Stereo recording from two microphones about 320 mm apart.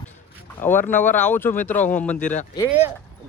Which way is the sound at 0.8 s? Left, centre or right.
Left.